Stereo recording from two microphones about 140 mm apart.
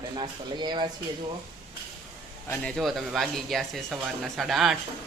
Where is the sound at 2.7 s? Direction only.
Centre (ahead or behind).